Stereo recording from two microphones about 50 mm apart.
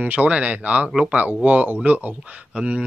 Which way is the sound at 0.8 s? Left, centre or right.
Centre.